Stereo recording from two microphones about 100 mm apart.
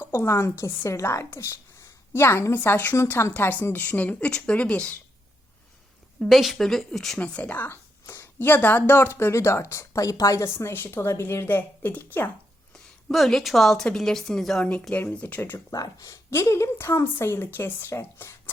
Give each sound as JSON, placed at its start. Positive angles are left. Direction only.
{"t": 0.0, "sound": "a woman's voice", "side_deg": 25}
{"t": 6.2, "sound": "a woman's voice", "side_deg": 0}
{"t": 7.2, "sound": "a woman's voice", "side_deg": 15}
{"t": 12.7, "sound": "a woman's voice", "side_deg": 0}
{"t": 15.7, "sound": "a woman's voice", "side_deg": 35}